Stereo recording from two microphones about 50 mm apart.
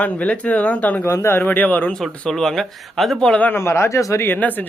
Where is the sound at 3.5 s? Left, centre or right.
Left.